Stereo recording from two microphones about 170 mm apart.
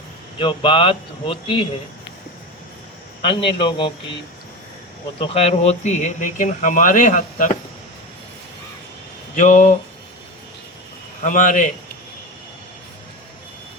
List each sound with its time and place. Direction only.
0.3 s speech: 30° left (ahead or behind)
3.2 s a man's voice: 30° left (ahead or behind)
5.2 s speech: 35° left (ahead or behind)
9.3 s speech: 50° left (ahead or behind)
11.2 s speech: 50° left (ahead or behind)